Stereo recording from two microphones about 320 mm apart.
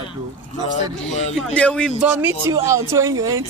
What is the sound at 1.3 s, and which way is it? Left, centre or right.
Speech, centre.